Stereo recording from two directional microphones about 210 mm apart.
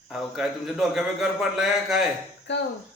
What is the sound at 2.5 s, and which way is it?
Speech, 55° left (ahead or behind).